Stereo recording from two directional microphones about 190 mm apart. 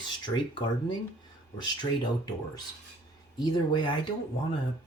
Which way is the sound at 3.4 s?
25° left (ahead or behind).